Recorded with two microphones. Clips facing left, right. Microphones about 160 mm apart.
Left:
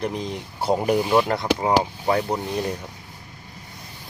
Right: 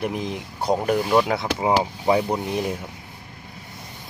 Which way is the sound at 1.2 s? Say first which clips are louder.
Left 1 dB; 5° right (ahead or behind).